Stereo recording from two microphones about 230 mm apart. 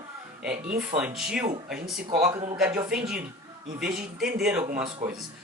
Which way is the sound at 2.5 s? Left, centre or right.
Centre.